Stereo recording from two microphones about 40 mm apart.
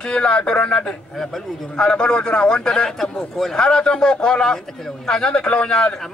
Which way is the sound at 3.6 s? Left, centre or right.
Left.